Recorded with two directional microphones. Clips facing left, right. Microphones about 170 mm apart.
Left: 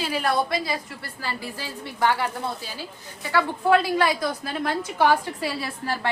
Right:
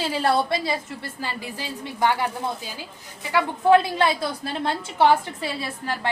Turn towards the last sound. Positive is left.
turn(degrees=-20)  # may be behind; listen again after turning